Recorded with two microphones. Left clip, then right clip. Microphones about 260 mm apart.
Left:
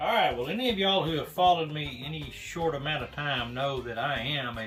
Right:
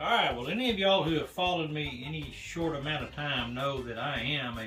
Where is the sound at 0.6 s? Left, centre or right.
Centre.